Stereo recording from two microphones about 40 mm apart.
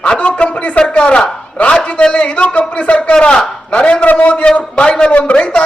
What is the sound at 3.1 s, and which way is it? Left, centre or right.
Speech, left.